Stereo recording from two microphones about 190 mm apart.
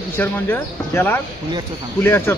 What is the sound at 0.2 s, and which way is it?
Speech, 10° left (ahead or behind).